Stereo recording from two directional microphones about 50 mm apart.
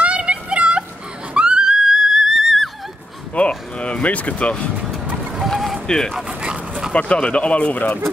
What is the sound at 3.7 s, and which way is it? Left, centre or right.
Speech, left.